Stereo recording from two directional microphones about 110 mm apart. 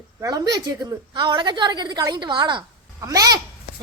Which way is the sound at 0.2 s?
35° right (ahead or behind).